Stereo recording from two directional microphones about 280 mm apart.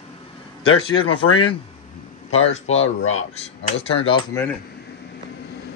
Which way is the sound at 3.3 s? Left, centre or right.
Left.